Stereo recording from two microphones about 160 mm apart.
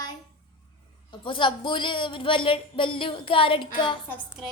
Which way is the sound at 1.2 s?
30° left (ahead or behind).